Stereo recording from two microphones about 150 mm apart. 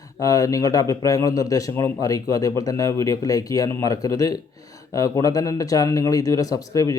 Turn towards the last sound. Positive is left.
turn(degrees=25)  # may be behind; listen again after turning